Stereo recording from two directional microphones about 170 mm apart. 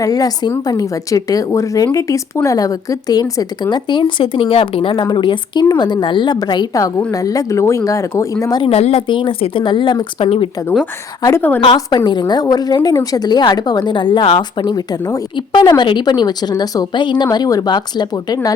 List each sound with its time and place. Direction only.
0.0 s speech: 20° left (ahead or behind)
8.7 s speech: 35° left (ahead or behind)
11.2 s a woman's voice: 15° left (ahead or behind)
11.6 s speech: 25° left (ahead or behind)